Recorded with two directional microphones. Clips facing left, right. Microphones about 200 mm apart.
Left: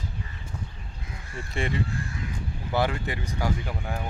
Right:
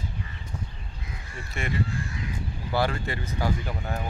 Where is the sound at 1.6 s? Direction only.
30° left (ahead or behind).